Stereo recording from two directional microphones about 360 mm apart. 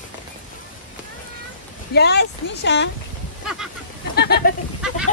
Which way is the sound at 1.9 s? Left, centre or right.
Left.